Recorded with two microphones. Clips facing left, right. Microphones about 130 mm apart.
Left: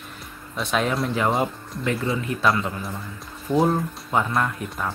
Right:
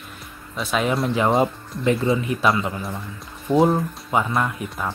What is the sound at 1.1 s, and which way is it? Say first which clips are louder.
Speech: right 4 dB; 25° right (ahead or behind).